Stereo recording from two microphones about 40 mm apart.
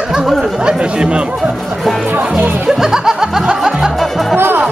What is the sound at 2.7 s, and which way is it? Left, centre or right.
Music, centre.